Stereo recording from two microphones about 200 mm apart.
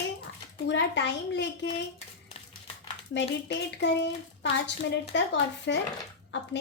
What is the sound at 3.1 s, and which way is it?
A child's voice, 60° left (ahead or behind).